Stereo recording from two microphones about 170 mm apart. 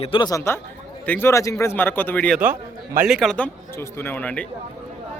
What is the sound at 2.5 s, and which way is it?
Speech, 55° right (ahead or behind).